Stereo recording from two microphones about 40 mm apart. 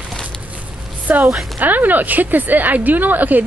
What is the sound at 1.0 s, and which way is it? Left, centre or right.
A woman's voice, right.